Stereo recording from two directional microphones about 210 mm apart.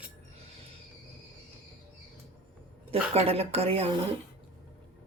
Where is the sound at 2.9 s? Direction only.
30° right (ahead or behind).